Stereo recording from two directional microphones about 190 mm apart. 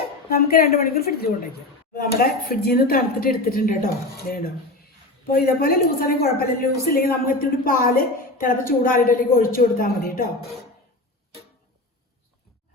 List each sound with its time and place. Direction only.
0.3 s a woman's voice: 55° left (ahead or behind)